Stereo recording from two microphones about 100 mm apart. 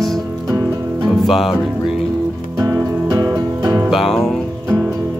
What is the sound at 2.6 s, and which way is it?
Music, 30° right (ahead or behind).